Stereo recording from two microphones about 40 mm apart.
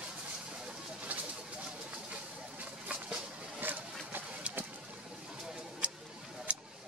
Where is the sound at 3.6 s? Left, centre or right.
Right.